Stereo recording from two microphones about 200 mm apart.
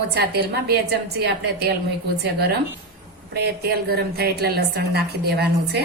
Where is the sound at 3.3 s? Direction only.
55° right (ahead or behind).